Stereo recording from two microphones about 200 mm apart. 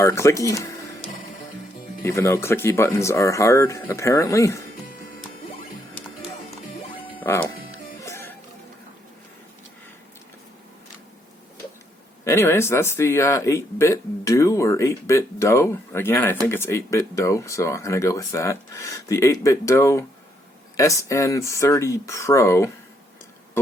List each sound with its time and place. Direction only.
0.0 s speech: 15° left (ahead or behind)
2.0 s speech: 15° left (ahead or behind)
7.3 s speech: 10° left (ahead or behind)
8.0 s music: 10° left (ahead or behind)
12.2 s speech: 10° left (ahead or behind)